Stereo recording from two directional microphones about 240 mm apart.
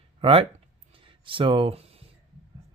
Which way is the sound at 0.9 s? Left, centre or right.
Right.